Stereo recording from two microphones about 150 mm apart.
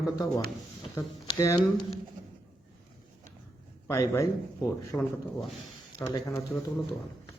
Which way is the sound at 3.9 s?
20° left (ahead or behind).